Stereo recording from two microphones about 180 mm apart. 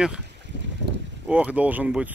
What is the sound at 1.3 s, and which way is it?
Speech, 5° right (ahead or behind).